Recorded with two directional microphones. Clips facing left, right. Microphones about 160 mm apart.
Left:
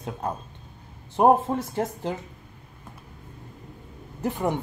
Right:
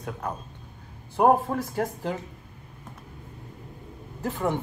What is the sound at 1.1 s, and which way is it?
Speech, 20° left (ahead or behind).